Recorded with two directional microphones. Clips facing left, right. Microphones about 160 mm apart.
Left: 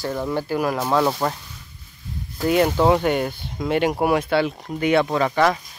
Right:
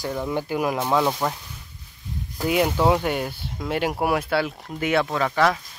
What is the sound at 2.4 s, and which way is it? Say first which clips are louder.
Speech: left 3 dB; 5° right (ahead or behind).